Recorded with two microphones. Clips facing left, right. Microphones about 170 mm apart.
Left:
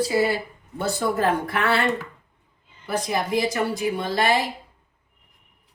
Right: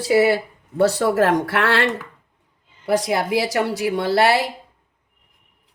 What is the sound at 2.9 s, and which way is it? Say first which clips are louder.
Speech: right 5 dB; 80° right.